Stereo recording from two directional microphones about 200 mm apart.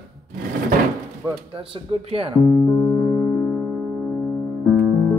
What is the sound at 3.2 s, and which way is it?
Music, 5° left (ahead or behind).